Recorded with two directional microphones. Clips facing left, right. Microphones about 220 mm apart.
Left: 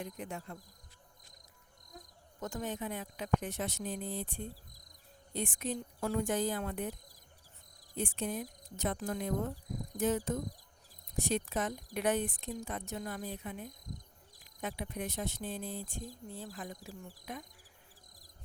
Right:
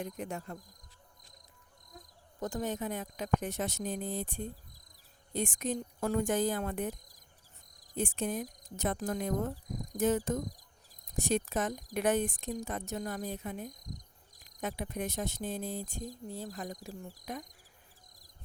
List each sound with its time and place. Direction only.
0.0 s speech: 45° right (ahead or behind)
2.4 s speech: 40° right (ahead or behind)
7.9 s speech: 45° right (ahead or behind)